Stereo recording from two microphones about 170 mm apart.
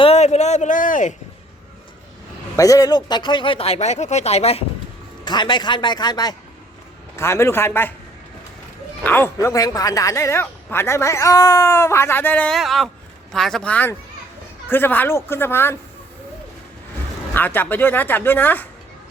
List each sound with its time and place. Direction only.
0.0 s a man's voice: 40° left (ahead or behind)
2.6 s speech: 20° left (ahead or behind); by 4.6 s 40° left (ahead or behind)
5.2 s a man's voice: 25° left (ahead or behind)
9.0 s a man's voice: 15° left (ahead or behind)
17.3 s a man's voice: 10° left (ahead or behind)